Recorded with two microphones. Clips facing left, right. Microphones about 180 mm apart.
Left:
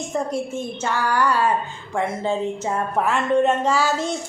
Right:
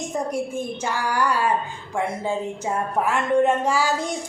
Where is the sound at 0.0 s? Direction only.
15° right (ahead or behind).